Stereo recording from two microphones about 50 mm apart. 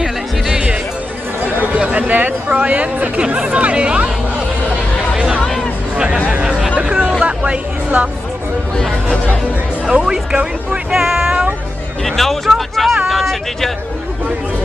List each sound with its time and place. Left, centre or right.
0.0 s music: centre
1.8 s speech: right
5.1 s a sound: centre
5.9 s speech: centre
9.8 s speech: centre
11.1 s music: centre
12.0 s music: centre
12.5 s a sound: centre